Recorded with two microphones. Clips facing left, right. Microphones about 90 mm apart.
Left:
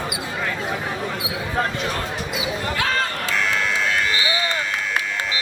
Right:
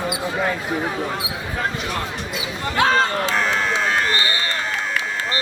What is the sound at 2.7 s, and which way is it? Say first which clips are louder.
Run: right 9 dB; 25° right (ahead or behind).